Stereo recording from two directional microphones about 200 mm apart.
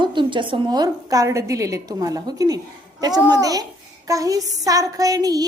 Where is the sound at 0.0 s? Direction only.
25° right (ahead or behind).